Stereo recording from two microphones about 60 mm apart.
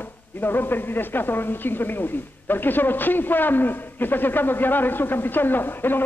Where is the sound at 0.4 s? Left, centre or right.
Left.